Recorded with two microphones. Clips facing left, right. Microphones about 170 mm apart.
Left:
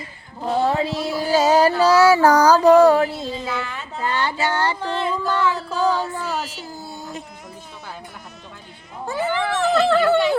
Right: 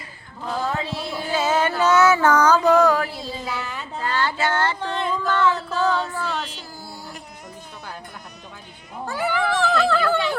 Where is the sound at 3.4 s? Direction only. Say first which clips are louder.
Left 2 dB; 5° right (ahead or behind).